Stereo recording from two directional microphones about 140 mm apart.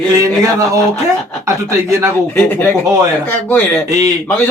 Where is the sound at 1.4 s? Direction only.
20° right (ahead or behind).